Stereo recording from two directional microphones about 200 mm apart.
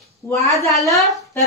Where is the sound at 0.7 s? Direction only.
15° left (ahead or behind).